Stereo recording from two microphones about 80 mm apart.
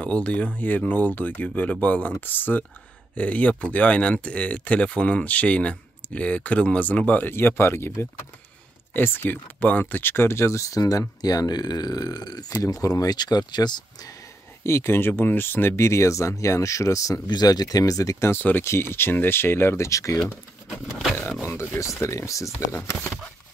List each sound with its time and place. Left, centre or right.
0.0 s speech: centre; by 7.9 s left
8.9 s speech: left
14.6 s speech: left
17.3 s speech: left
18.3 s speech: left
20.7 s a sound: centre
21.7 s speech: left
22.7 s speech: left